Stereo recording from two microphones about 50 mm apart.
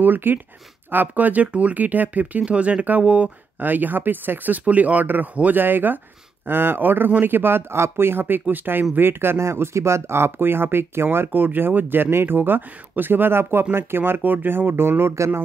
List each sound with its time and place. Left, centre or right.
0.0 s speech: right
2.4 s speech: right
3.5 s speech: right
9.4 s speech: right